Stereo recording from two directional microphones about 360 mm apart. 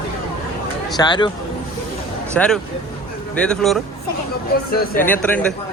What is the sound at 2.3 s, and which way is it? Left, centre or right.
A man's voice, centre.